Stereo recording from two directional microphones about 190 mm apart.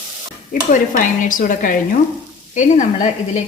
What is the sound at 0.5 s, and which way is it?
A woman's voice, 40° left (ahead or behind).